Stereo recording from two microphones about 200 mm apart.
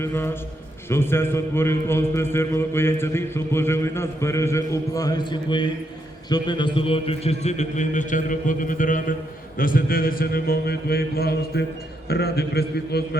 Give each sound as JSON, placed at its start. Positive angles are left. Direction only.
{"t": 0.0, "sound": "a man's voice", "side_deg": 10}